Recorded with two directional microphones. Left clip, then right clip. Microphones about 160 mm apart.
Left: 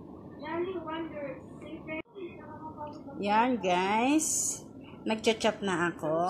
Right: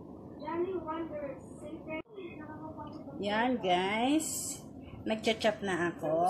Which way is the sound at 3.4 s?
60° left (ahead or behind).